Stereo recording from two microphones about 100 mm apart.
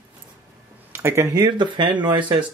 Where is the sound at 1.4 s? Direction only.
50° right (ahead or behind).